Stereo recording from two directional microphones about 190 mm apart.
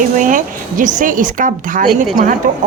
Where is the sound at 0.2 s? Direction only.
45° right (ahead or behind).